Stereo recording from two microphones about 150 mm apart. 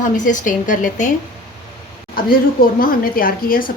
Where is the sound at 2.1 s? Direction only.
75° left (ahead or behind).